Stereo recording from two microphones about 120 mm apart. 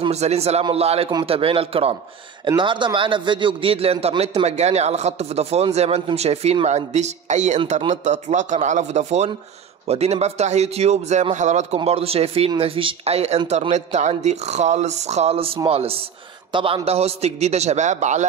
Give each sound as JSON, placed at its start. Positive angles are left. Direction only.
{"t": 0.1, "sound": "a man's voice", "side_deg": -65}
{"t": 2.4, "sound": "a man's voice", "side_deg": -40}
{"t": 4.5, "sound": "a man's voice", "side_deg": -65}
{"t": 9.8, "sound": "speech", "side_deg": -60}
{"t": 13.5, "sound": "speech", "side_deg": -70}